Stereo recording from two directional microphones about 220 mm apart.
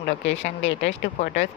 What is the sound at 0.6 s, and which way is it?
Speech, 55° left (ahead or behind).